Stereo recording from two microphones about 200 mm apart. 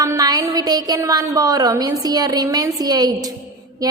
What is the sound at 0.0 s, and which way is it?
A woman's voice, 15° right (ahead or behind).